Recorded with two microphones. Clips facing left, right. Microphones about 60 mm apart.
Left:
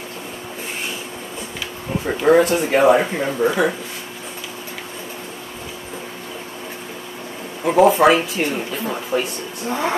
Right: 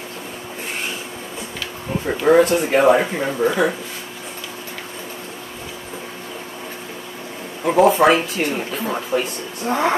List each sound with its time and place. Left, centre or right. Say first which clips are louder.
2.0 s speech: even; centre
7.6 s speech: left 1 dB; centre
9.7 s speech: right 3 dB; right